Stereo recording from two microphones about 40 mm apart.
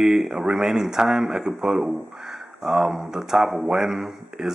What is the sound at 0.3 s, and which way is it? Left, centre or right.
Speech, centre.